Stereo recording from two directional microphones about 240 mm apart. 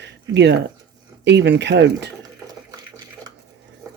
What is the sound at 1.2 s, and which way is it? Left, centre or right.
Speech, right.